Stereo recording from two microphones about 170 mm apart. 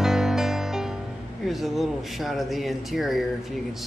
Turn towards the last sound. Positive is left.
turn(degrees=0)  # may be behind; listen again after turning